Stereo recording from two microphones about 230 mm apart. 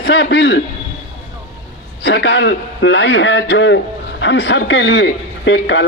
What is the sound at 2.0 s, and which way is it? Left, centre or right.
A man's voice, left.